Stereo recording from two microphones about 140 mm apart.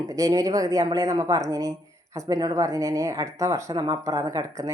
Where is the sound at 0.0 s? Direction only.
25° right (ahead or behind).